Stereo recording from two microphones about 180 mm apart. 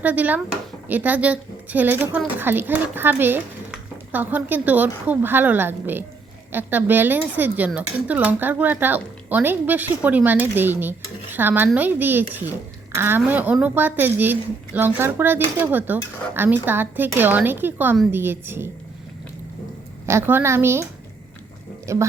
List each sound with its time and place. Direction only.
0.0 s speech: 10° right (ahead or behind)
20.1 s speech: 15° right (ahead or behind)
21.9 s speech: 15° right (ahead or behind)